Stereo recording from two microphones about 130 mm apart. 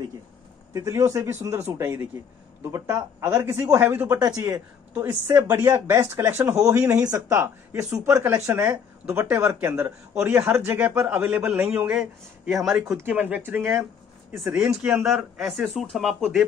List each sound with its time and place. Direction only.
0.7 s speech: 25° right (ahead or behind)
12.6 s speech: 5° right (ahead or behind)
12.9 s speech: 15° right (ahead or behind)
14.3 s speech: 5° right (ahead or behind)